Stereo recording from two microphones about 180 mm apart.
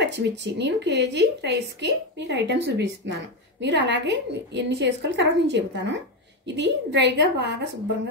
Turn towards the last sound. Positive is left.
turn(degrees=-70)  # may be behind; listen again after turning